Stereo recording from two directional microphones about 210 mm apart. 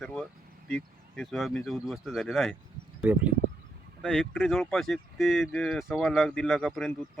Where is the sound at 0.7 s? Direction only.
Centre (ahead or behind).